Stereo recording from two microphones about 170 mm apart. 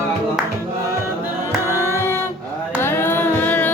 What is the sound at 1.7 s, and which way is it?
Music, 15° left (ahead or behind).